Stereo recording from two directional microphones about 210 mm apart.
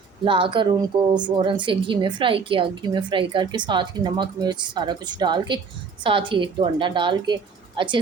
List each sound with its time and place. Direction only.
0.3 s a woman's voice: 25° right (ahead or behind)